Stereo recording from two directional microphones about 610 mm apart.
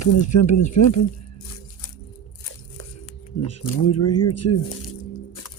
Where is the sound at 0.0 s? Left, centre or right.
Left.